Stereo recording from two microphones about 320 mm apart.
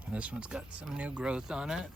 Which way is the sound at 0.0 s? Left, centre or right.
Centre.